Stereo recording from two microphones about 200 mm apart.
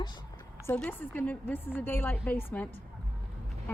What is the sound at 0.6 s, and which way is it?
A woman's voice, 10° left (ahead or behind).